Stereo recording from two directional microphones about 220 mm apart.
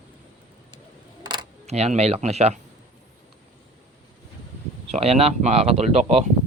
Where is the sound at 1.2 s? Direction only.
20° right (ahead or behind).